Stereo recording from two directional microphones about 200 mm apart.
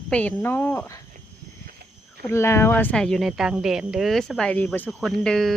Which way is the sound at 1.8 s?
50° right (ahead or behind).